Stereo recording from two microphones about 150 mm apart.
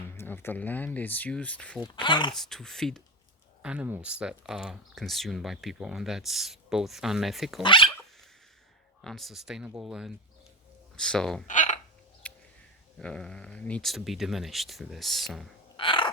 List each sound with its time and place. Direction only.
0.1 s speech: 15° left (ahead or behind)
2.0 s speech: 30° left (ahead or behind)
2.3 s speech: centre (ahead or behind)
3.6 s speech: 10° right (ahead or behind)
7.6 s speech: 35° left (ahead or behind)
7.9 s dog: 5° left (ahead or behind)
9.0 s speech: centre (ahead or behind)
11.4 s a sound: 55° left (ahead or behind)
12.2 s music: 10° left (ahead or behind)
13.0 s speech: 5° left (ahead or behind)
15.8 s crow: 35° left (ahead or behind)